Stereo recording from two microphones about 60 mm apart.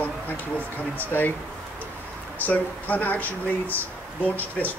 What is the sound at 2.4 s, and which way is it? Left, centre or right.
Speech, left.